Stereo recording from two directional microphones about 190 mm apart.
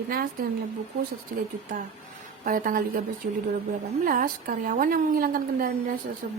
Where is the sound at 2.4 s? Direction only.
45° right (ahead or behind).